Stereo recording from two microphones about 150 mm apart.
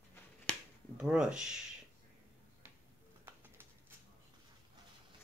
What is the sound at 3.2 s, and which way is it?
Bird, 15° right (ahead or behind).